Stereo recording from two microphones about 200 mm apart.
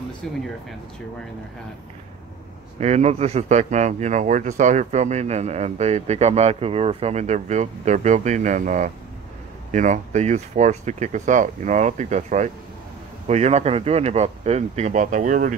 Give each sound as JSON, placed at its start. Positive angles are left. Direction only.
{"t": 0.2, "sound": "speech", "side_deg": 0}
{"t": 2.8, "sound": "speech", "side_deg": -35}